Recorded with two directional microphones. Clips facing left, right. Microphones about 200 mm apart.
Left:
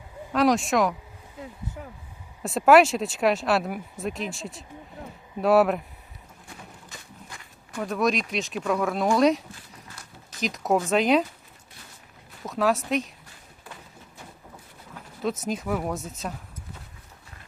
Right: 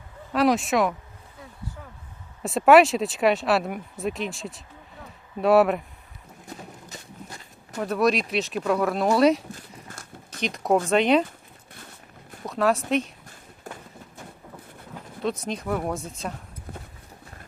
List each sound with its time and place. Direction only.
0.3 s speech: centre (ahead or behind)
1.4 s a sound: 25° left (ahead or behind)
2.4 s speech: centre (ahead or behind)
7.8 s speech: centre (ahead or behind)
10.4 s speech: centre (ahead or behind)
12.5 s speech: centre (ahead or behind)
13.7 s run: 45° right (ahead or behind)
15.4 s speech: 5° left (ahead or behind)